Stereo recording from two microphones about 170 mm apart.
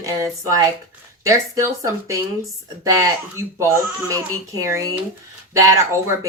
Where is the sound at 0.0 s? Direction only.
20° right (ahead or behind).